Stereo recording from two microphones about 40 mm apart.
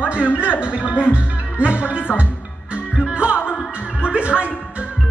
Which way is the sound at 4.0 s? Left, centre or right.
Right.